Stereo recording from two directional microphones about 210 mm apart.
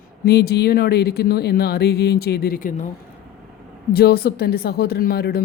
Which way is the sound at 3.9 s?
50° left (ahead or behind).